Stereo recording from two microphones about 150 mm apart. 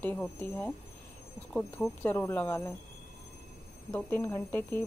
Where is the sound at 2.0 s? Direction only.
15° left (ahead or behind).